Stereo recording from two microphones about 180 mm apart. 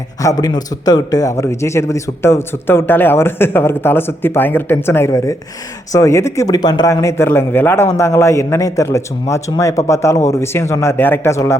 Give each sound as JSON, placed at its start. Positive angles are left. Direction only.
{"t": 0.2, "sound": "a man's voice", "side_deg": 20}